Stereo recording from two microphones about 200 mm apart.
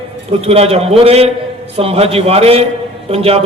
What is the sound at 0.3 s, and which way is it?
A man's voice, 30° right (ahead or behind).